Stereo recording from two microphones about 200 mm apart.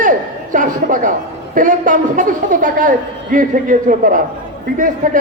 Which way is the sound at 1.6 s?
40° right (ahead or behind).